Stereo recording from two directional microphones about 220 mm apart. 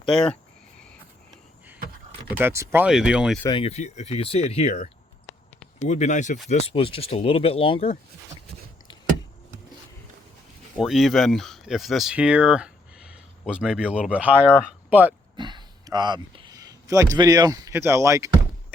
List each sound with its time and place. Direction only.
0.0 s speech: 5° left (ahead or behind)
2.4 s speech: 10° right (ahead or behind)
3.4 s speech: 25° left (ahead or behind)
10.8 s speech: centre (ahead or behind)
15.4 s a sound: 20° right (ahead or behind)